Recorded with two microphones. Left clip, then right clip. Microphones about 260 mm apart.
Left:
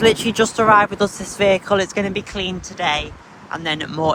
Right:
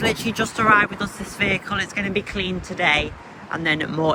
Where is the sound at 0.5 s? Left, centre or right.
Centre.